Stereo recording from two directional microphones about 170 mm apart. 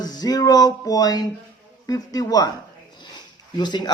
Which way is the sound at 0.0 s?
25° left (ahead or behind).